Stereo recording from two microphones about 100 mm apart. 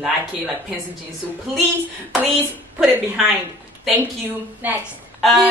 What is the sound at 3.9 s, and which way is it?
Speech, 20° right (ahead or behind).